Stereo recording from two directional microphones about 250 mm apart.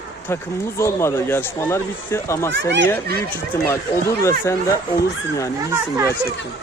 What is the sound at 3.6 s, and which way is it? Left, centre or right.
Speech, centre.